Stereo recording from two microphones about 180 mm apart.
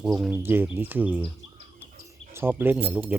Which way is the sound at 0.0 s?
5° right (ahead or behind).